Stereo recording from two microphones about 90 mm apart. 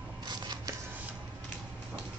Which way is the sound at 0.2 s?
55° right (ahead or behind).